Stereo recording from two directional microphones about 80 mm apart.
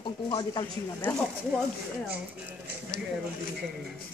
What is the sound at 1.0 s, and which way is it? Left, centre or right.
Speech, left.